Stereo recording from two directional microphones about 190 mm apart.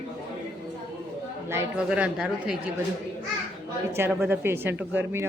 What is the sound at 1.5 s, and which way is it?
Speech, 10° right (ahead or behind).